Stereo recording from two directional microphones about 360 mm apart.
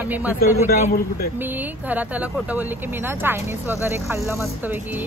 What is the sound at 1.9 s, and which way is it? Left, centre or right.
Speech, centre.